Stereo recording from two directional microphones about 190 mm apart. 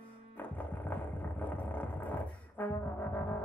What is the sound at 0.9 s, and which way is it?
Music, 10° left (ahead or behind).